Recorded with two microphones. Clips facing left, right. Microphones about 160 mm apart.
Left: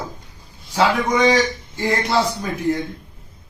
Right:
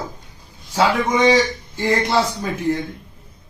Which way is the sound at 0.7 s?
15° left (ahead or behind).